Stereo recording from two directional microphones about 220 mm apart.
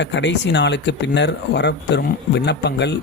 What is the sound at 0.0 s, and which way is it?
Speech, 55° left (ahead or behind).